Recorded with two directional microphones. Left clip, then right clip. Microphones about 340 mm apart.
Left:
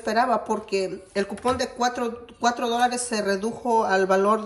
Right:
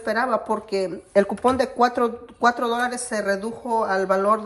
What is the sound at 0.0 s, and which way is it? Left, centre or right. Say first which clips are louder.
A woman's voice: even; centre.